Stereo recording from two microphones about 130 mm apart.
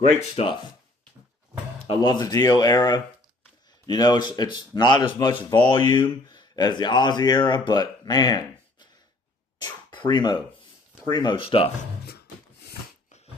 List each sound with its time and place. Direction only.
0.2 s speech: 50° left (ahead or behind)
2.0 s speech: 35° left (ahead or behind)
9.6 s a sound: 35° left (ahead or behind)
11.1 s speech: 35° left (ahead or behind)
13.1 s dog: 60° left (ahead or behind)